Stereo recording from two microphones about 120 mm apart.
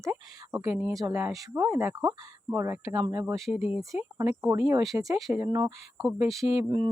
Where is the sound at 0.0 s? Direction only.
25° right (ahead or behind).